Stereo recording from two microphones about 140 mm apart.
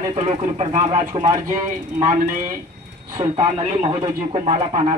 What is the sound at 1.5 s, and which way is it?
Speech, 70° right (ahead or behind).